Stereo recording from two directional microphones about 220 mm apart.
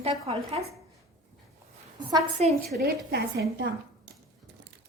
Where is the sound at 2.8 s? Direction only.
45° right (ahead or behind).